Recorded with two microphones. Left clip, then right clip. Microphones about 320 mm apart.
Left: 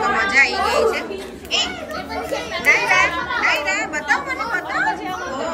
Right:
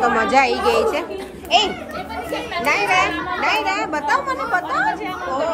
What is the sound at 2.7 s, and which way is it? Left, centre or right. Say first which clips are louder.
Speech: left 2 dB; right.